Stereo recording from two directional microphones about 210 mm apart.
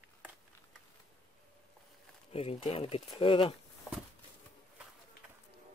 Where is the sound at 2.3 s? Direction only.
25° left (ahead or behind).